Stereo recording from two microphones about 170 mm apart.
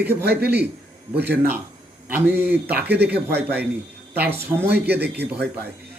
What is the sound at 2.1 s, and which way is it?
A man's voice, 10° right (ahead or behind).